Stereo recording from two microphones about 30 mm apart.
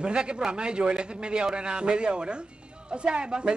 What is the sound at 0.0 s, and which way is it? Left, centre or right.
A man's voice, right.